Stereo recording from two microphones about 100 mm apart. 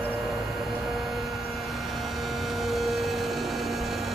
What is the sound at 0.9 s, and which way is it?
Vehicle, centre (ahead or behind).